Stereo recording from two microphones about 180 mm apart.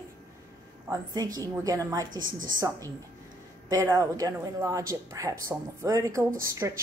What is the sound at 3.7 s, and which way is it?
A woman's voice, 20° right (ahead or behind).